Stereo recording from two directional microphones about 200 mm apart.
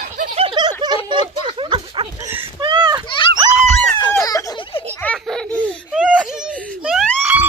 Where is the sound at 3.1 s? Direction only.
25° left (ahead or behind).